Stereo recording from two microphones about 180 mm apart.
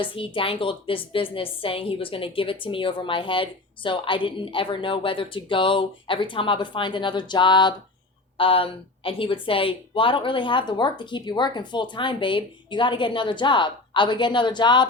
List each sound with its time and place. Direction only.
0.0 s a woman's voice: 30° left (ahead or behind)